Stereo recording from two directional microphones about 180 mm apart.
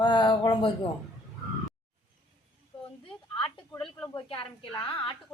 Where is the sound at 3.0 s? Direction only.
30° left (ahead or behind).